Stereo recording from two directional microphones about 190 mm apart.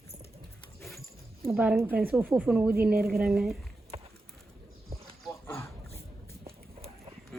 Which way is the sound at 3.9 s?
30° right (ahead or behind).